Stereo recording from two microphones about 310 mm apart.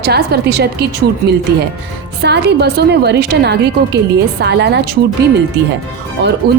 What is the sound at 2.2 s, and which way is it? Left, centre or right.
A woman's voice, right.